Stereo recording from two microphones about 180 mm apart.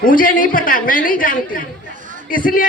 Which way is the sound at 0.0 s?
50° left (ahead or behind).